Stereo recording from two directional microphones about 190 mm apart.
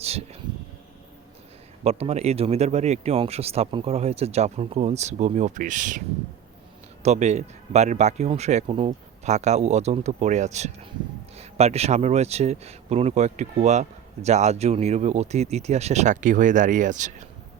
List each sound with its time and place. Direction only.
0.0 s speech: 35° right (ahead or behind)
1.8 s speech: 35° right (ahead or behind)
7.0 s speech: 35° right (ahead or behind)